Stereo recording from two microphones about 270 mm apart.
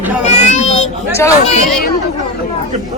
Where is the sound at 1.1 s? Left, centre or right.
Centre.